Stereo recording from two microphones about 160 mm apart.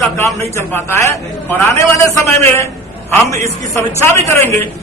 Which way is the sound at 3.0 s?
20° left (ahead or behind).